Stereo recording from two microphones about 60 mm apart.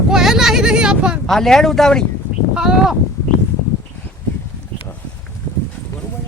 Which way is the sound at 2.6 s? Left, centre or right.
Centre.